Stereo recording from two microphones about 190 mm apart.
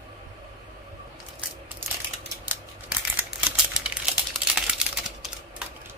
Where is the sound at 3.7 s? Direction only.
5° right (ahead or behind).